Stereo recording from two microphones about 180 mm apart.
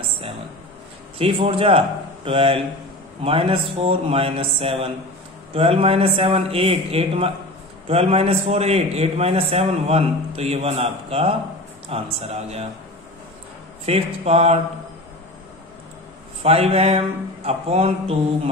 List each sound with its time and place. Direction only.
1.1 s a man's voice: 30° right (ahead or behind)
13.8 s a man's voice: 35° right (ahead or behind)
16.4 s a man's voice: 35° right (ahead or behind)